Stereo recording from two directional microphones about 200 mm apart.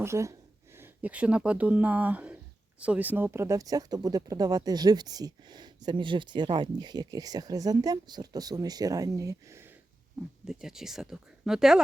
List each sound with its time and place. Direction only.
0.0 s speech: 15° right (ahead or behind)
10.4 s speech: 5° right (ahead or behind)